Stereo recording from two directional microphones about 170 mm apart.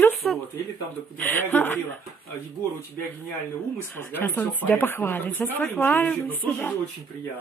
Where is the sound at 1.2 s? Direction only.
10° left (ahead or behind).